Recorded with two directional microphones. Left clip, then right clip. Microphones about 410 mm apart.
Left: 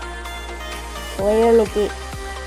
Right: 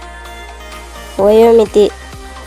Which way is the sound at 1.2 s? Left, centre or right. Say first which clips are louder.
Right 8 dB; right.